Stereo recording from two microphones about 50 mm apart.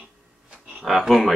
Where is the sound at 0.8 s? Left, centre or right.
Centre.